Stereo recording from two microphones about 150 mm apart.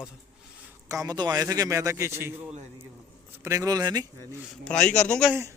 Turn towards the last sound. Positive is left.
turn(degrees=5)  # may be behind; listen again after turning